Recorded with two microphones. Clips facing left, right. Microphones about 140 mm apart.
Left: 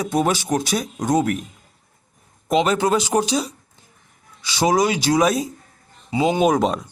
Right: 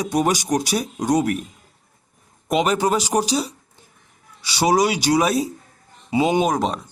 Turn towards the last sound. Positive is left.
turn(degrees=0)  # may be behind; listen again after turning